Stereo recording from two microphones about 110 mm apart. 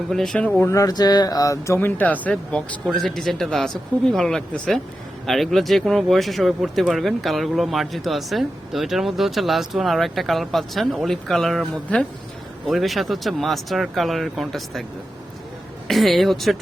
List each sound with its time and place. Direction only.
0.1 s speech: 5° left (ahead or behind)
0.6 s speech: 30° left (ahead or behind); by 14.8 s centre (ahead or behind)
15.9 s speech: centre (ahead or behind)